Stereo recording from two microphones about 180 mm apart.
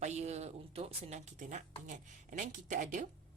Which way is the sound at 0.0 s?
40° right (ahead or behind).